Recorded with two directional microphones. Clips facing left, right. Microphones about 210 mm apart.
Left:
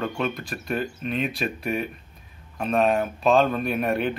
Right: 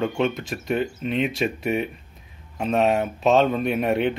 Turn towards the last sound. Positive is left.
turn(degrees=-20)  # may be behind; listen again after turning